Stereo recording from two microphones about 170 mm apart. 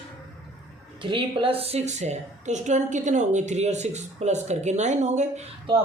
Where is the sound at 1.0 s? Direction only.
30° right (ahead or behind).